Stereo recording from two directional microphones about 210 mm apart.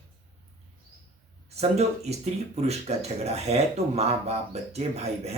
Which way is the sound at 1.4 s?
30° right (ahead or behind).